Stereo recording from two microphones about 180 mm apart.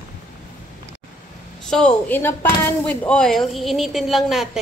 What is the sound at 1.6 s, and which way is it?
Speech, 5° left (ahead or behind).